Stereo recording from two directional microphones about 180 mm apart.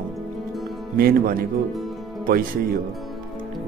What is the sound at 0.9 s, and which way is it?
Speech, 55° right (ahead or behind).